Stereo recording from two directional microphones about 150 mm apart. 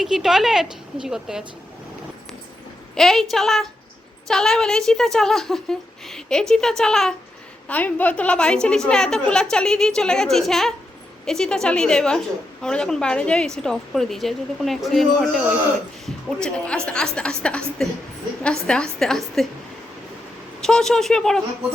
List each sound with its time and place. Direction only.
0.0 s a woman's voice: centre (ahead or behind)
2.9 s a woman's voice: centre (ahead or behind)
20.6 s a woman's voice: 5° left (ahead or behind)